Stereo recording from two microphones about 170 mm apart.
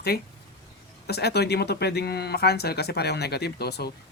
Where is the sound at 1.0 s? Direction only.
75° left (ahead or behind).